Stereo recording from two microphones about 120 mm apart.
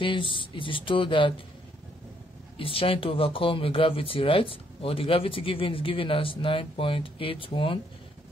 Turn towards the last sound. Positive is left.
turn(degrees=45)  # may be behind; listen again after turning